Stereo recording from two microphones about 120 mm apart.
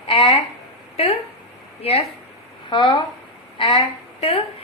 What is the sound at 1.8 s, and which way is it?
Speech, 55° left (ahead or behind).